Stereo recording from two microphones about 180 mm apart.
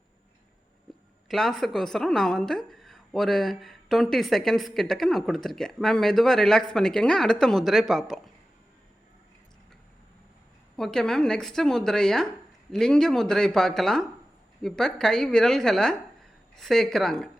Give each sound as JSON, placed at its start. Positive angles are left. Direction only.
{"t": 1.3, "sound": "a woman's voice", "side_deg": 0}
{"t": 10.8, "sound": "a woman's voice", "side_deg": 0}